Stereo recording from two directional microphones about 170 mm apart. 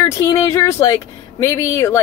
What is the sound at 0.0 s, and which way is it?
Speech, 15° left (ahead or behind).